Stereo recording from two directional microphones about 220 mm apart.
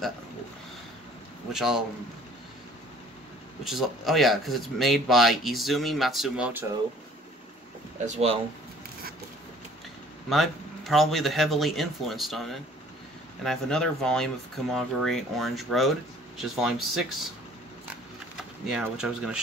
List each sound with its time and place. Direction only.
1.5 s speech: centre (ahead or behind)
3.6 s speech: centre (ahead or behind)
8.0 s speech: 30° right (ahead or behind)
10.3 s speech: centre (ahead or behind)
18.7 s speech: 5° right (ahead or behind)